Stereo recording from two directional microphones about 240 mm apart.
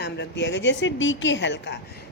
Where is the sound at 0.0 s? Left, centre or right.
Left.